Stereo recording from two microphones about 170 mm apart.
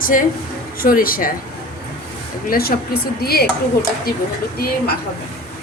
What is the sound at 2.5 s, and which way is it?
Speech, 65° left (ahead or behind).